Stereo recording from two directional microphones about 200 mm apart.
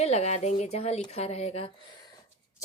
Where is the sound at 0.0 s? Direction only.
30° left (ahead or behind).